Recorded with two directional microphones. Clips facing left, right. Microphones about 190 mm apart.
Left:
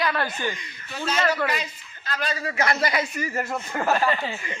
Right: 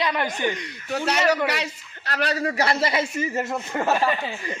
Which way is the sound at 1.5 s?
70° right (ahead or behind).